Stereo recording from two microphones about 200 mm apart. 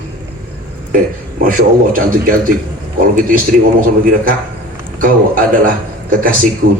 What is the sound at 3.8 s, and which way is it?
Speech, 45° right (ahead or behind).